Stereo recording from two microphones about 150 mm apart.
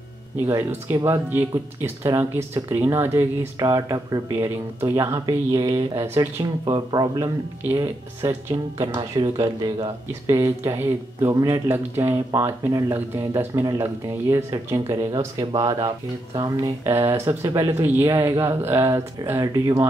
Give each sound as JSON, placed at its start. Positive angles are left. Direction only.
{"t": 0.5, "sound": "speech", "side_deg": -15}
{"t": 6.6, "sound": "speech", "side_deg": -30}
{"t": 8.8, "sound": "speech", "side_deg": -30}